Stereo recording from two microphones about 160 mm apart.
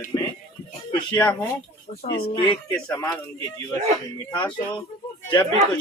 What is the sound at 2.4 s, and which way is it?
Speech, 10° left (ahead or behind).